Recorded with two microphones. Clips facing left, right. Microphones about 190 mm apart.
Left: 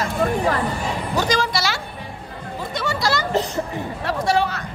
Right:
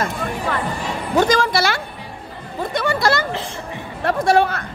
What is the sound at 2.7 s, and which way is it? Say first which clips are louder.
Hubbub: right 4 dB; 55° right (ahead or behind).